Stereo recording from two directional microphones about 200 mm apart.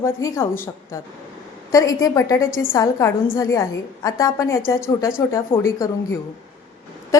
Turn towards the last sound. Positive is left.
turn(degrees=15)  # may be behind; listen again after turning